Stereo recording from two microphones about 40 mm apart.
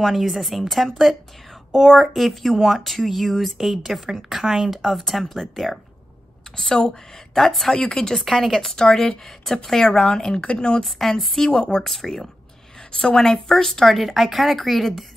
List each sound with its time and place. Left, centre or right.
0.0 s speech: centre
7.3 s speech: centre
7.7 s speech: centre
8.1 s speech: centre
8.8 s speech: centre
10.4 s speech: left
10.8 s speech: centre
11.4 s speech: left
11.8 s speech: centre
12.9 s speech: centre